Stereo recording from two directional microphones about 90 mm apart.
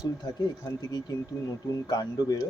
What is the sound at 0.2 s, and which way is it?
Speech, 50° left (ahead or behind).